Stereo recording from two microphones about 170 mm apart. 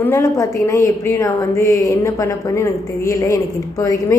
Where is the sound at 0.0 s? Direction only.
15° left (ahead or behind).